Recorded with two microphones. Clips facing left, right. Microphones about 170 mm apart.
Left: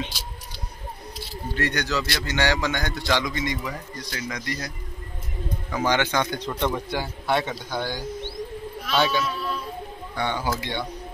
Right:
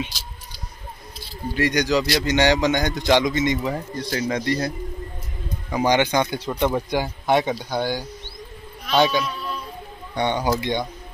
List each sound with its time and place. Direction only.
1.5 s a man's voice: 15° right (ahead or behind); by 4.7 s 30° right (ahead or behind)
5.7 s speech: 15° right (ahead or behind)
8.9 s speech: centre (ahead or behind)
9.2 s a sound: centre (ahead or behind)
10.1 s a man's voice: 20° right (ahead or behind)